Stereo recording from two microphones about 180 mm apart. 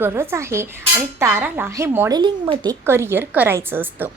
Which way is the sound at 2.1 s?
25° right (ahead or behind).